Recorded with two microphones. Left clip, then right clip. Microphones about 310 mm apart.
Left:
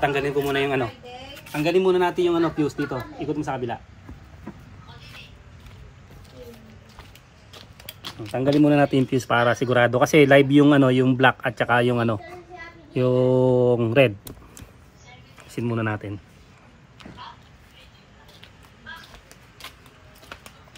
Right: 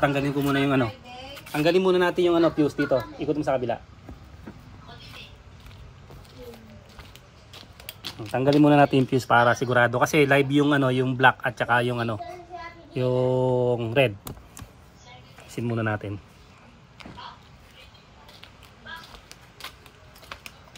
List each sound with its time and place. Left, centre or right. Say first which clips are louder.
0.1 s a man's voice: left 2 dB; right
1.3 s speech: even; centre
7.5 s speech: left 1 dB; centre
13.1 s mantra: left 4 dB; centre
13.9 s speech: left 4 dB; centre
15.5 s speech: left 1 dB; centre
19.6 s a sound: right 1 dB; centre